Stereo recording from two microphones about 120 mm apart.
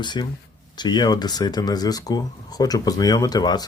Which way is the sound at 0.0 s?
40° left (ahead or behind).